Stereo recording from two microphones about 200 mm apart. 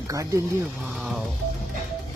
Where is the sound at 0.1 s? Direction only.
15° right (ahead or behind).